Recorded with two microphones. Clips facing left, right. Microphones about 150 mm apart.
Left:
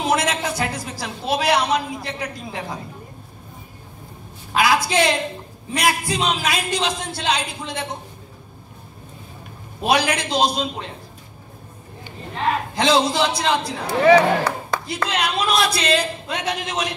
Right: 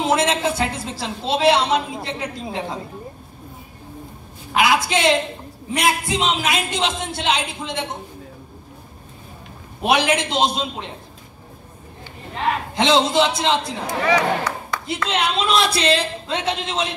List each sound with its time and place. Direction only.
0.0 s a woman's voice: 25° right (ahead or behind)
4.6 s a woman's voice: 20° right (ahead or behind)
9.8 s a woman's voice: 25° right (ahead or behind)
12.7 s a woman's voice: 25° right (ahead or behind)
14.0 s speech: 55° left (ahead or behind)
15.0 s a woman's voice: 25° right (ahead or behind)